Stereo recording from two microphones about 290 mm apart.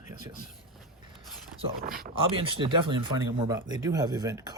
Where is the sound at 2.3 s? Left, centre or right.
Centre.